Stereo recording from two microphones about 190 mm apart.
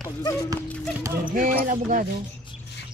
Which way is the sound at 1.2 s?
45° right (ahead or behind).